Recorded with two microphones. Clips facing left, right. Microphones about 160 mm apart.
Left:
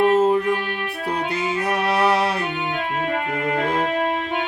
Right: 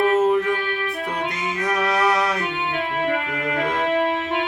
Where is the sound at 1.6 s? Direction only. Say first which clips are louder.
Even; 30° left (ahead or behind).